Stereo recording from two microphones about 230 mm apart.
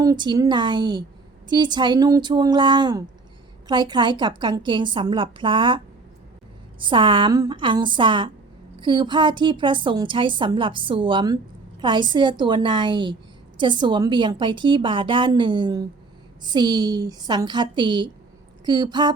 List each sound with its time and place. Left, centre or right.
0.0 s a woman's voice: centre